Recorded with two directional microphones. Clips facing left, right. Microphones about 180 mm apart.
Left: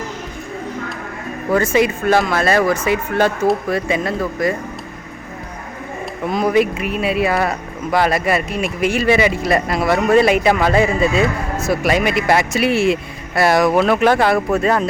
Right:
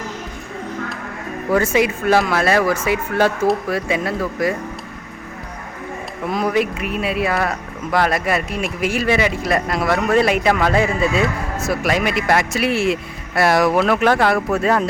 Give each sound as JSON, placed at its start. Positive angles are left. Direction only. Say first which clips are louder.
{"t": 1.5, "sound": "speech", "louder": "left 1 dB", "side_deg": -10}
{"t": 6.2, "sound": "speech", "louder": "left 3 dB", "side_deg": 0}